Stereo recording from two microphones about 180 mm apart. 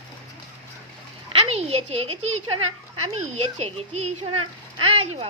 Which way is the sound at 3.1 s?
35° right (ahead or behind).